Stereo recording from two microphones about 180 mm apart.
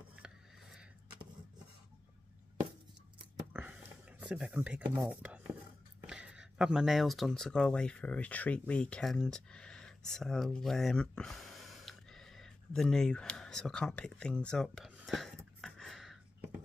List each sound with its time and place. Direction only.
0.1 s rub: 5° right (ahead or behind)
3.5 s a sound: 10° right (ahead or behind)
6.0 s speech: 5° right (ahead or behind)